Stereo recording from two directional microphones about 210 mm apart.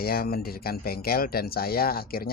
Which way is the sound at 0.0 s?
45° left (ahead or behind).